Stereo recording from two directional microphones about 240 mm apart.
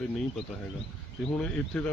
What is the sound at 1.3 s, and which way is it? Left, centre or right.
Speech, centre.